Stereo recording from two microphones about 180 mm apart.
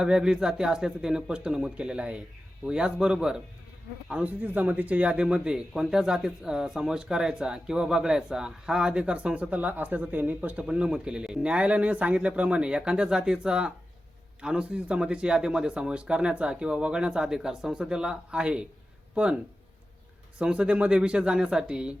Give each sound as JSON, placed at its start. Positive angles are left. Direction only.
{"t": 0.0, "sound": "speech", "side_deg": -5}
{"t": 20.4, "sound": "speech", "side_deg": -5}